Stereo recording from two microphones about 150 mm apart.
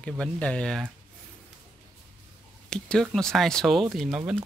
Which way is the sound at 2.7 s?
5° left (ahead or behind).